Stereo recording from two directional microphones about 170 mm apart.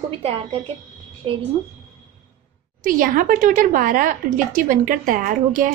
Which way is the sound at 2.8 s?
50° right (ahead or behind).